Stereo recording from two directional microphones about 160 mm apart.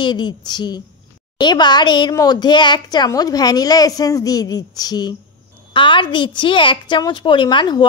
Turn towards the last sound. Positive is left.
turn(degrees=30)  # may be behind; listen again after turning